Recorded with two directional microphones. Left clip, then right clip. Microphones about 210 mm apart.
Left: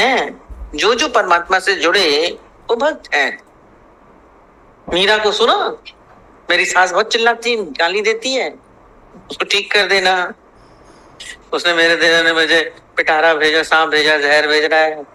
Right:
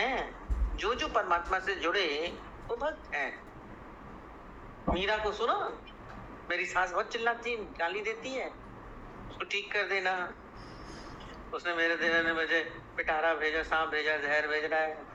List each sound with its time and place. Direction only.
0.0 s a sound: 65° left (ahead or behind)
0.8 s a man's voice: 60° left (ahead or behind)
4.9 s a man's voice: 60° left (ahead or behind)
11.5 s a man's voice: 60° left (ahead or behind)